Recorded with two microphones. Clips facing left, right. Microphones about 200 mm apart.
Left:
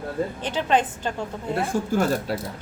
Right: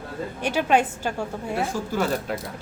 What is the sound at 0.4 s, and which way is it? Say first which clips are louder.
Speech: right 3 dB; 10° right (ahead or behind).